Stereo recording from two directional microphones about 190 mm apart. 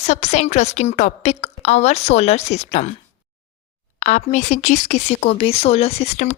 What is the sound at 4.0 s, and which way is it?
Speech, 40° left (ahead or behind).